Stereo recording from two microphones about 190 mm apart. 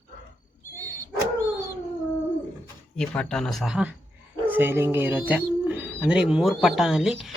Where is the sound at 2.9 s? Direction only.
5° left (ahead or behind).